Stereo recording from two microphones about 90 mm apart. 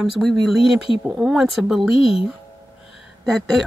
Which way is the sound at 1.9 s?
90° left.